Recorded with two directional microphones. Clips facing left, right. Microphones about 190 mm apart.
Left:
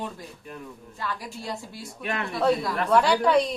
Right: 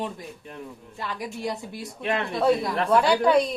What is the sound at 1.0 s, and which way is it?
A woman's voice, 20° right (ahead or behind).